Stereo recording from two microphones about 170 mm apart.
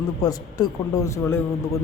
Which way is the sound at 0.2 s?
20° left (ahead or behind).